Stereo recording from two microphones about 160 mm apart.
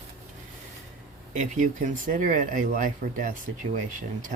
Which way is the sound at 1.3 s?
50° right (ahead or behind).